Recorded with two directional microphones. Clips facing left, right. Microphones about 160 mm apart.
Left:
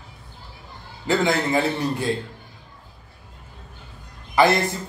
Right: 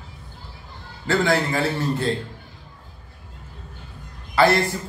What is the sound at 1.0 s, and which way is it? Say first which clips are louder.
A man's voice: even; 15° left (ahead or behind).